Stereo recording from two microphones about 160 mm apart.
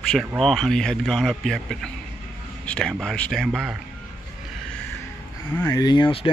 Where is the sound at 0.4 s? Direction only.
Centre (ahead or behind).